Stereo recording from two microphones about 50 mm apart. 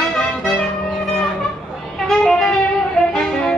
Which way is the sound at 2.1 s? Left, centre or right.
Centre.